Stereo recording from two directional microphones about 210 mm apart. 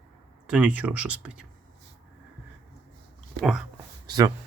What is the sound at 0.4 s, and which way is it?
Speech, 5° right (ahead or behind).